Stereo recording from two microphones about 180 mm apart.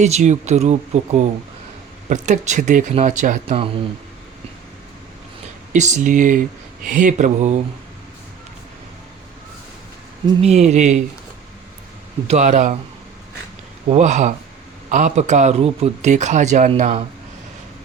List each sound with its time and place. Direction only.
0.0 s a man's voice: 40° right (ahead or behind)
5.7 s speech: 40° right (ahead or behind)
10.4 s a man's voice: 40° right (ahead or behind)
12.3 s speech: 40° right (ahead or behind)
13.9 s a man's voice: 40° right (ahead or behind)